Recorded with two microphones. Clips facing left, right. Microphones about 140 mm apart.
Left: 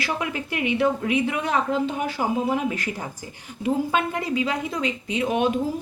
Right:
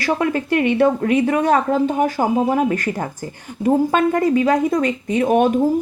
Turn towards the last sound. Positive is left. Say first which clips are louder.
# right 7 dB
turn(degrees=-45)  # may be behind; listen again after turning